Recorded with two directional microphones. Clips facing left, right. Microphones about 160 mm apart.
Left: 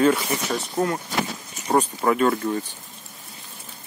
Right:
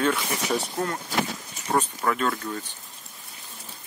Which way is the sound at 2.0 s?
20° left (ahead or behind).